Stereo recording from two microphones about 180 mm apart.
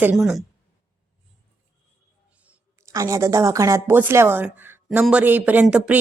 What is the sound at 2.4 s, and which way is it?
A woman's voice, 15° right (ahead or behind).